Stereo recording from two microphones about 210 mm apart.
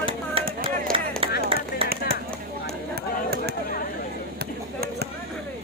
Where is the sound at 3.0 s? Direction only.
50° right (ahead or behind).